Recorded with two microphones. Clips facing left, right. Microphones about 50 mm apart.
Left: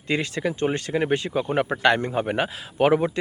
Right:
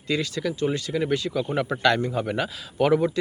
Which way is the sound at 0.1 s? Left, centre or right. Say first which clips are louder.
Left 1 dB; left.